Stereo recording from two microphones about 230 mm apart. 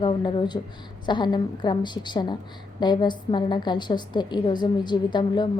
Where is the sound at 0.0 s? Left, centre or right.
Left.